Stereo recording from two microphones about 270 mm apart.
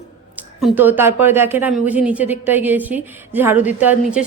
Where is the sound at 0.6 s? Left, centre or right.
Centre.